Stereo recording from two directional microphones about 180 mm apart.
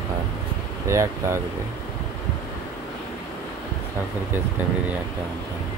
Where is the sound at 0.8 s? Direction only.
15° right (ahead or behind).